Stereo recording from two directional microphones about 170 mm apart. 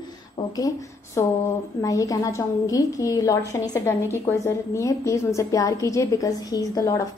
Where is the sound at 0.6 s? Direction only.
20° left (ahead or behind).